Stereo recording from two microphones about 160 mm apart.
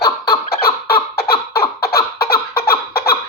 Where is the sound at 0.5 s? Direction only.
75° left (ahead or behind).